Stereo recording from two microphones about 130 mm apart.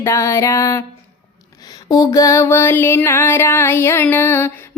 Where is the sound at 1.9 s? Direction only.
25° left (ahead or behind).